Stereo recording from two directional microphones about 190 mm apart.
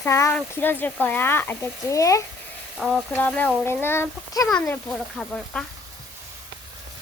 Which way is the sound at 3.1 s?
10° left (ahead or behind).